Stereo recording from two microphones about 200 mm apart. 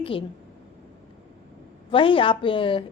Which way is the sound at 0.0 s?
25° left (ahead or behind).